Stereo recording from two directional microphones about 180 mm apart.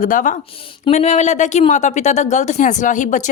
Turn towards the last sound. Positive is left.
turn(degrees=45)  # may be behind; listen again after turning